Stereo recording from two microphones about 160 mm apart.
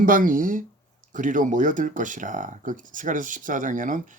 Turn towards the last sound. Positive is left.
turn(degrees=-55)  # may be behind; listen again after turning